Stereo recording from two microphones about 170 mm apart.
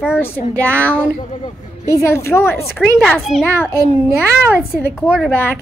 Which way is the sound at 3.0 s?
Centre (ahead or behind).